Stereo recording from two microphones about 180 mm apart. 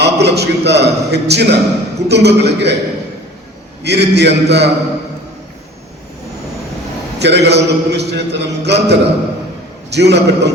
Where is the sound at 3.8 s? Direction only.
70° right (ahead or behind).